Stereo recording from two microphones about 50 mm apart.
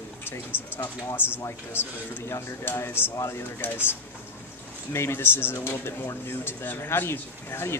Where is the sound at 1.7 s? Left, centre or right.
Left.